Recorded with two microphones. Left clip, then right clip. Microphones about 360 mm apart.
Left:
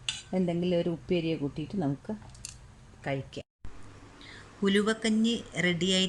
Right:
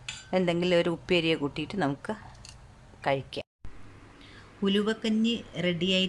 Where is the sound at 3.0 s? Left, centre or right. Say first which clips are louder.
Right 6 dB; centre.